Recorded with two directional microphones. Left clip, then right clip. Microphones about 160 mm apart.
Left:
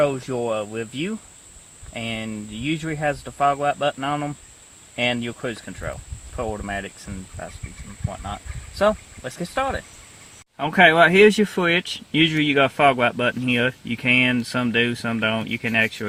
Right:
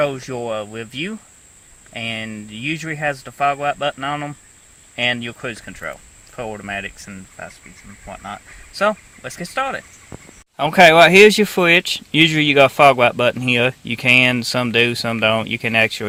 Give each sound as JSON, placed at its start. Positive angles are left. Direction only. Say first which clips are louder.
{"t": 0.0, "sound": "speech", "louder": "even", "side_deg": -10}
{"t": 8.8, "sound": "speech", "louder": "right 1 dB", "side_deg": -15}
{"t": 10.6, "sound": "speech", "louder": "right 5 dB", "side_deg": -35}